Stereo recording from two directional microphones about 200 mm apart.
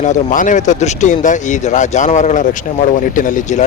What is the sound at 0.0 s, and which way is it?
Speech, 40° left (ahead or behind).